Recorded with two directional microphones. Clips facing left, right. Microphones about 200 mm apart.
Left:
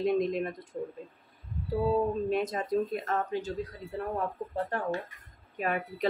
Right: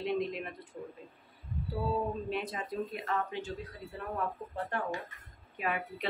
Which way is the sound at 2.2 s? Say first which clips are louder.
Left 7 dB; 45° left (ahead or behind).